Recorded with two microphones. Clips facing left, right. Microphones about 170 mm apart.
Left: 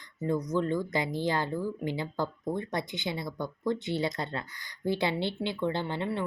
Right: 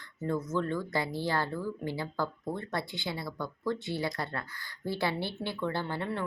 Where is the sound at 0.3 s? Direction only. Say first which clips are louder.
Left 3 dB; 15° left (ahead or behind).